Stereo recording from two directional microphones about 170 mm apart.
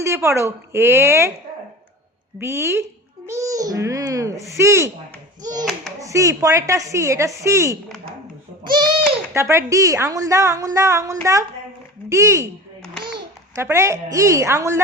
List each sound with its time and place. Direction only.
0.0 s speech: 15° right (ahead or behind)
2.4 s a child's voice: 15° right (ahead or behind)
8.6 s a child's voice: 25° right (ahead or behind)
9.3 s a woman's voice: 15° right (ahead or behind)
13.0 s babbling: 30° right (ahead or behind)
13.6 s speech: 15° right (ahead or behind)